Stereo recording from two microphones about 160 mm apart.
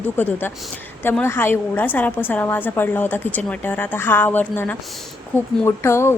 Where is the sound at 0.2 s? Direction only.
15° left (ahead or behind).